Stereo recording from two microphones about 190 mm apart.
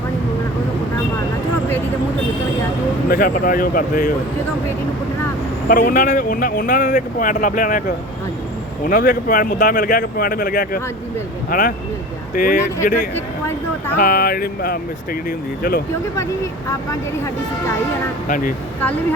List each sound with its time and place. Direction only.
3.1 s speech: 50° left (ahead or behind)
5.6 s speech: 50° left (ahead or behind)
8.9 s speech: 45° left (ahead or behind)
14.0 s speech: 50° left (ahead or behind)
16.1 s speech: 15° left (ahead or behind)
18.3 s speech: 45° left (ahead or behind)